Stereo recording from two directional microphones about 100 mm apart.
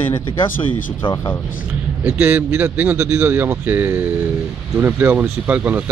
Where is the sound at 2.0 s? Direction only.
20° right (ahead or behind).